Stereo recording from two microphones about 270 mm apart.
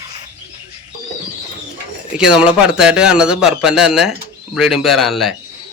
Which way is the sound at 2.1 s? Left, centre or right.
Centre.